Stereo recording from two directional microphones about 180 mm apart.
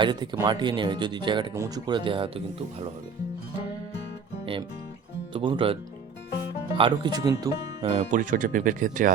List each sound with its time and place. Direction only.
0.0 s speech: 25° right (ahead or behind)
5.3 s speech: 30° right (ahead or behind)
6.7 s speech: 25° right (ahead or behind)
8.1 s speech: 50° right (ahead or behind)